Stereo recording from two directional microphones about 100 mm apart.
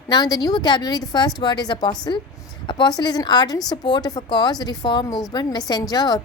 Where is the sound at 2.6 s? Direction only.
55° left (ahead or behind).